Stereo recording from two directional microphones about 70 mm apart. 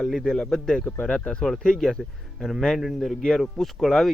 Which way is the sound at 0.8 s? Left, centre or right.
Left.